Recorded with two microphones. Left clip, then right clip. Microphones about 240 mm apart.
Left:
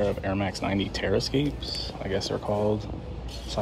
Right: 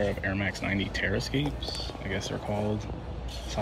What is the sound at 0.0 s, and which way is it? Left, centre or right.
Speech, centre.